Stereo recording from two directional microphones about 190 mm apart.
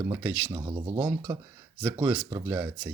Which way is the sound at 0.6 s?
20° right (ahead or behind).